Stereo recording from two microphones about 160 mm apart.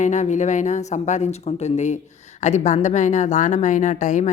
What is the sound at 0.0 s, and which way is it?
Speech, 50° left (ahead or behind).